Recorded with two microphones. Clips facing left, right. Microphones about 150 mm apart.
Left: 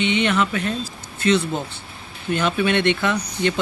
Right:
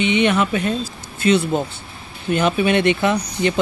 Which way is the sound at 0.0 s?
15° right (ahead or behind).